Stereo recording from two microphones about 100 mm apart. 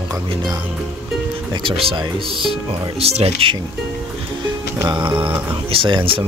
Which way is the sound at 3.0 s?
90° right.